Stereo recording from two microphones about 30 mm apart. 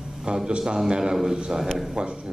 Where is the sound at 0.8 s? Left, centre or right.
Right.